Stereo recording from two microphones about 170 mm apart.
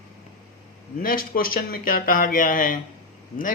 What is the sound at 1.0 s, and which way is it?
Speech, 55° left (ahead or behind).